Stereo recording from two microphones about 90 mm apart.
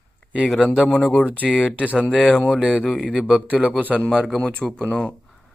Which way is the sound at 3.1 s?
5° right (ahead or behind).